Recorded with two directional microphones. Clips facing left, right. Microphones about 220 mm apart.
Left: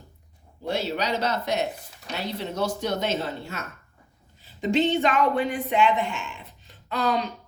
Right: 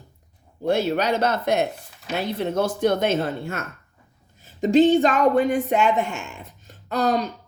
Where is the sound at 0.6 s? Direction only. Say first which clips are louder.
Right 6 dB; 50° right (ahead or behind).